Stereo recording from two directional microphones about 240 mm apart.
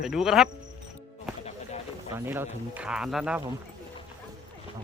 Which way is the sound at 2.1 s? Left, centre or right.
Centre.